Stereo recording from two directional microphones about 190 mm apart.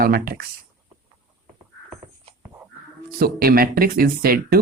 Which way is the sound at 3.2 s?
50° right (ahead or behind).